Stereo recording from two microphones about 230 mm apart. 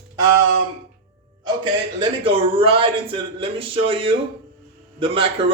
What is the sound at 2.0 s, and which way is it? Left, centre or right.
A man's voice, right.